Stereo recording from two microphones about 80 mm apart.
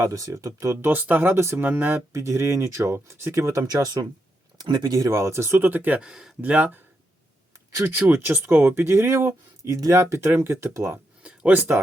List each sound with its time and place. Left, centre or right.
0.0 s speech: right
0.9 s speech: right
2.1 s speech: right
3.7 s speech: right
6.0 s speech: centre
6.4 s speech: right
7.9 s speech: right
11.2 s a sound: centre